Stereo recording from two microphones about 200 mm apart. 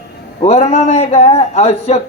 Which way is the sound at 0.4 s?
30° left (ahead or behind).